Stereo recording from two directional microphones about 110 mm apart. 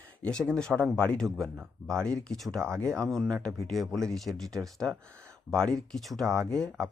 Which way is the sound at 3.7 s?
5° left (ahead or behind).